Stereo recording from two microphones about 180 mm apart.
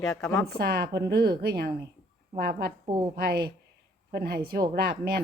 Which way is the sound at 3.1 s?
55° right (ahead or behind).